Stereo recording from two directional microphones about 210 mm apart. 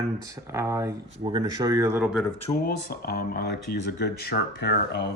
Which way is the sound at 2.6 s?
45° left (ahead or behind).